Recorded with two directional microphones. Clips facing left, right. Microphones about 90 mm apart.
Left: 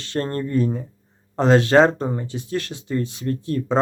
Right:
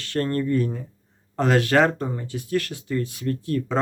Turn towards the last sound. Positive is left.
turn(degrees=25)  # may be behind; listen again after turning